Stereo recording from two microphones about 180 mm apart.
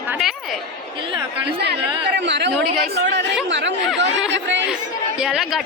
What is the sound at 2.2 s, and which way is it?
Speech, 75° right (ahead or behind).